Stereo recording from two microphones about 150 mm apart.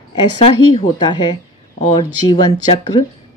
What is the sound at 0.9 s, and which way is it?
Speech, 30° left (ahead or behind).